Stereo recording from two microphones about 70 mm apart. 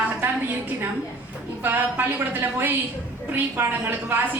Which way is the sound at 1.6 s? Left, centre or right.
Right.